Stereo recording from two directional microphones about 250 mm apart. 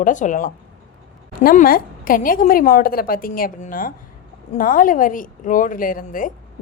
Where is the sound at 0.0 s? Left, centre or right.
Left.